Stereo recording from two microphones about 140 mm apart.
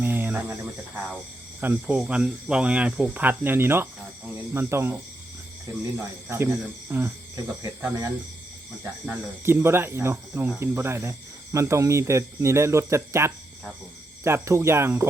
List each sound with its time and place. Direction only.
0.0 s speech: 15° right (ahead or behind)
6.3 s speech: 15° right (ahead or behind)